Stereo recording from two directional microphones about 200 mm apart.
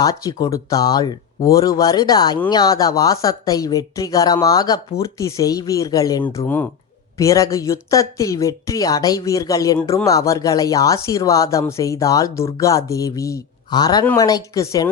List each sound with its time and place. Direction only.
0.0 s speech: 20° left (ahead or behind)